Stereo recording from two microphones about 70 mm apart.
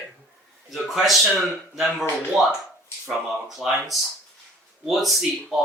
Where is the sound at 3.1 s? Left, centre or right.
Centre.